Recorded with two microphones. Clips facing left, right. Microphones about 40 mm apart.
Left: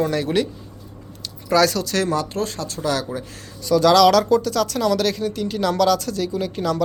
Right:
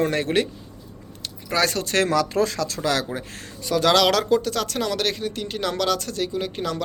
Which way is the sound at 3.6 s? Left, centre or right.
Right.